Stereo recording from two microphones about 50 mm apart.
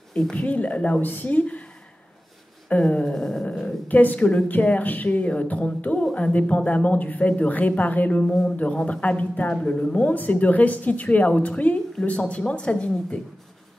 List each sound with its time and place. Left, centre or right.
0.3 s speech: left
2.7 s speech: left
3.1 s a sound: centre
3.9 s speech: left